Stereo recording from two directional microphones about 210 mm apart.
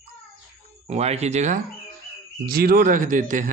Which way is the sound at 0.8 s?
30° right (ahead or behind).